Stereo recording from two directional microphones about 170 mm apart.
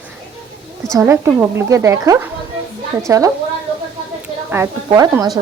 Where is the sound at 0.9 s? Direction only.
15° right (ahead or behind).